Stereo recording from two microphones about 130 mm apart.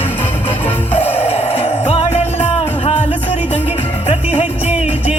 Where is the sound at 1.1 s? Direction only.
50° left (ahead or behind).